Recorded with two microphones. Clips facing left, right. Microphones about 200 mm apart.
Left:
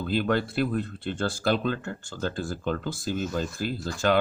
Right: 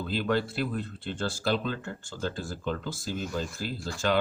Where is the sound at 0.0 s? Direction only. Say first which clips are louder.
Left 3 dB; 55° left (ahead or behind).